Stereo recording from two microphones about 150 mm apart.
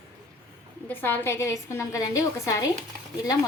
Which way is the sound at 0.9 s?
15° left (ahead or behind).